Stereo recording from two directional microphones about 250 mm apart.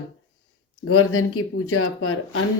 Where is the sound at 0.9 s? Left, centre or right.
Left.